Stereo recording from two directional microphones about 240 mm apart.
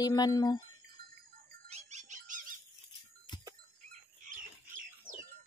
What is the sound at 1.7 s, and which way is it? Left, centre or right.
Dog, right.